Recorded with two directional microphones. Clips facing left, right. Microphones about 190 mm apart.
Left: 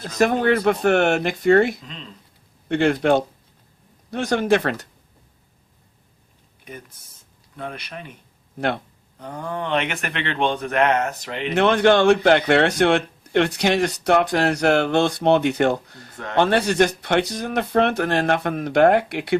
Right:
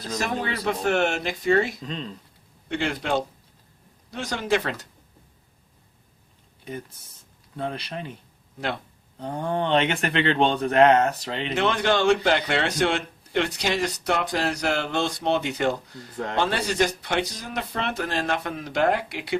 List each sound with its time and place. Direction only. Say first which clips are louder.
0.2 s a man's voice: left 12 dB; 55° left (ahead or behind)
7.5 s speech: right 2 dB; 30° right (ahead or behind)
9.1 s speech: right 3 dB; 30° right (ahead or behind)
11.5 s a man's voice: left 7 dB; 55° left (ahead or behind)